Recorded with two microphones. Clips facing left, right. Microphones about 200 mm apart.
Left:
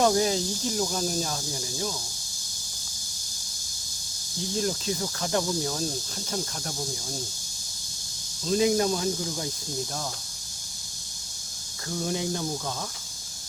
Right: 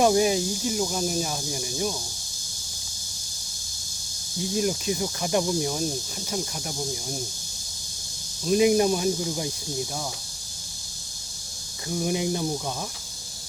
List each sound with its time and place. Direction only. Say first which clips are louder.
0.0 s speech: right 3 dB; 15° right (ahead or behind)
4.5 s speech: right 3 dB; 15° right (ahead or behind)
8.4 s speech: right 4 dB; 15° right (ahead or behind)
11.9 s speech: right 3 dB; 15° right (ahead or behind)